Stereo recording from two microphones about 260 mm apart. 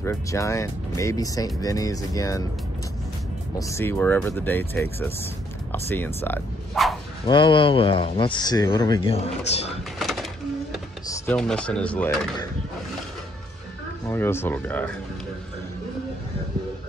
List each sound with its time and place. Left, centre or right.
0.0 s speech: centre
3.5 s speech: centre
7.2 s speech: centre
9.9 s bird: centre
11.1 s speech: centre
14.0 s speech: centre